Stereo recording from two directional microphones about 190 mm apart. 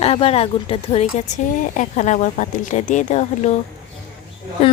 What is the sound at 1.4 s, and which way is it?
Speech, 45° left (ahead or behind).